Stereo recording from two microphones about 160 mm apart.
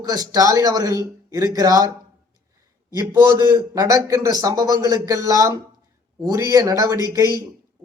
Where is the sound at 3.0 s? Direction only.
20° right (ahead or behind).